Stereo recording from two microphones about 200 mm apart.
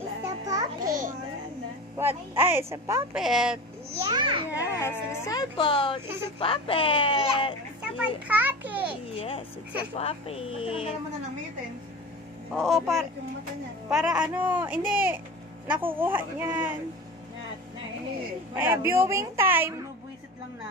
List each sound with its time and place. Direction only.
0.2 s a sound: 20° right (ahead or behind)
0.7 s children playing: 40° right (ahead or behind)
2.0 s a woman's voice: 10° right (ahead or behind)
3.2 s a man's voice: centre (ahead or behind)
4.1 s a child's voice: 25° right (ahead or behind)
4.6 s a woman's voice: 15° left (ahead or behind)
8.3 s a woman's voice: 10° right (ahead or behind)
9.0 s a woman's voice: 30° left (ahead or behind)
12.5 s a man's voice: centre (ahead or behind)
18.6 s a woman's voice: 10° right (ahead or behind)